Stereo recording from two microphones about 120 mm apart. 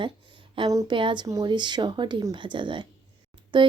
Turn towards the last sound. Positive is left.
turn(degrees=-40)  # may be behind; listen again after turning